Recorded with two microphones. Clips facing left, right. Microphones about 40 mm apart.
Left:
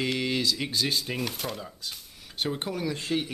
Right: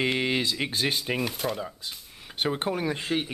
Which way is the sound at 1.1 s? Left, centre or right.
Centre.